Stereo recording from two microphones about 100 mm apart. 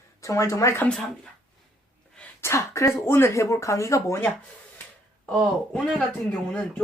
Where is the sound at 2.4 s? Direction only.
30° left (ahead or behind).